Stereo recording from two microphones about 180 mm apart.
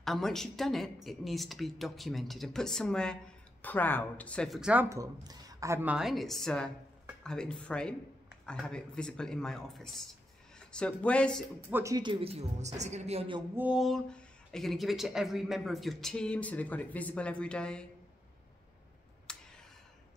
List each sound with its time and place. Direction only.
0.0 s a woman's voice: centre (ahead or behind)
4.8 s speech: 20° right (ahead or behind); by 11.4 s 5° left (ahead or behind)
11.7 s speech: 15° right (ahead or behind); by 13.4 s 35° right (ahead or behind)
13.6 s speech: 5° right (ahead or behind)
19.3 s a sound: 5° left (ahead or behind)